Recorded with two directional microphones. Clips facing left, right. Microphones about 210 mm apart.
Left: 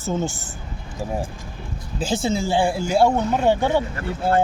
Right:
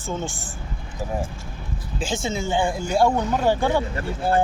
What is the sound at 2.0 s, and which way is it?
Speech, 35° left (ahead or behind).